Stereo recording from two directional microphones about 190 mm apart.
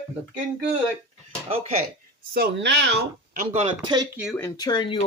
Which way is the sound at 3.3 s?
30° right (ahead or behind).